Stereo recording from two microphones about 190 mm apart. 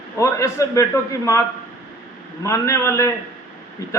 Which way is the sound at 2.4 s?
15° left (ahead or behind).